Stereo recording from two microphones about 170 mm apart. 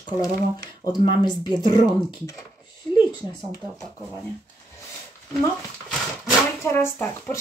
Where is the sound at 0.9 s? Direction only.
25° left (ahead or behind).